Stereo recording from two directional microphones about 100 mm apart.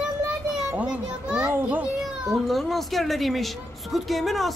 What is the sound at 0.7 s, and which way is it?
Children playing, 10° right (ahead or behind).